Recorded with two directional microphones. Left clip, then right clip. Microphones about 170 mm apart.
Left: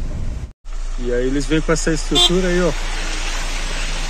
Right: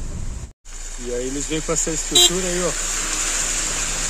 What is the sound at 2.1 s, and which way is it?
Speech, 15° right (ahead or behind).